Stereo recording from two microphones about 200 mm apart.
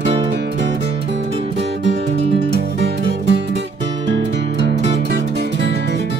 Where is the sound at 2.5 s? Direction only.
60° right (ahead or behind).